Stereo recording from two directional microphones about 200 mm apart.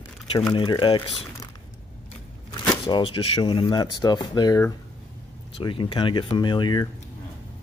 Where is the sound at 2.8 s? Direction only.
25° left (ahead or behind).